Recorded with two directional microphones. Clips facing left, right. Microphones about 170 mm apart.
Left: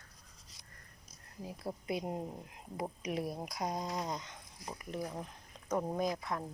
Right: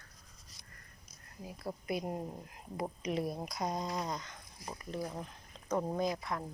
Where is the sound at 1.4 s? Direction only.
20° left (ahead or behind).